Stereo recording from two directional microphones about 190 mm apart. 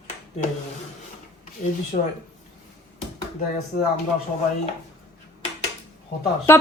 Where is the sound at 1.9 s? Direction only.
45° left (ahead or behind).